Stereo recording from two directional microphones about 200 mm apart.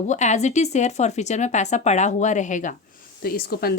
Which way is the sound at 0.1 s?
35° left (ahead or behind).